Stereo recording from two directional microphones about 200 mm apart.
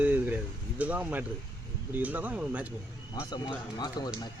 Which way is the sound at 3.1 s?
20° left (ahead or behind).